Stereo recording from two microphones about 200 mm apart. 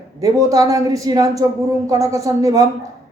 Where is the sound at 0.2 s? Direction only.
15° right (ahead or behind).